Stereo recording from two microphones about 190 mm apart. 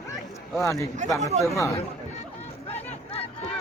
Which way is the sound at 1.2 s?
35° right (ahead or behind).